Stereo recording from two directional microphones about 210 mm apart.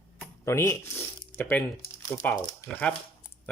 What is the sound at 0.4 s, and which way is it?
Speech, 15° left (ahead or behind).